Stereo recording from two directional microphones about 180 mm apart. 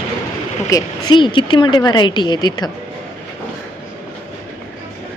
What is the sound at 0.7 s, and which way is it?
A woman's voice, 25° left (ahead or behind).